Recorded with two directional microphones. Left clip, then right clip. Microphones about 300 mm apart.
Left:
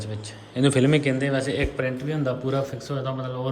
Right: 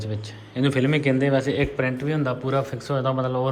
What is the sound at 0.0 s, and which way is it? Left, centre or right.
A man's voice, centre.